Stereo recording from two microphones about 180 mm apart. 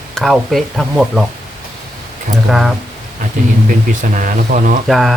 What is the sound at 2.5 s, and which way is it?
Speech, centre (ahead or behind).